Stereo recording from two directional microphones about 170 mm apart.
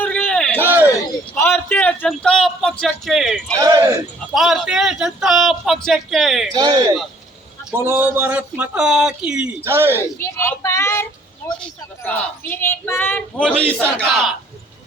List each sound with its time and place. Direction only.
0.0 s a sound: 5° left (ahead or behind)
0.5 s a sound: 10° right (ahead or behind)
1.4 s a man's voice: 15° left (ahead or behind)
3.6 s speech: 20° right (ahead or behind)
4.4 s a man's voice: centre (ahead or behind)
6.5 s speech: 25° right (ahead or behind)
7.8 s a man's voice: 10° right (ahead or behind)
10.0 s speech: 15° left (ahead or behind)
12.0 s a man's voice: 10° left (ahead or behind)